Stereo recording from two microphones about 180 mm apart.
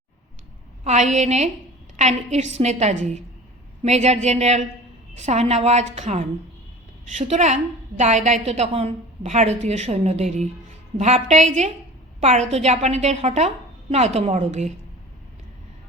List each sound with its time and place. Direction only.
0.9 s a woman's voice: 40° right (ahead or behind)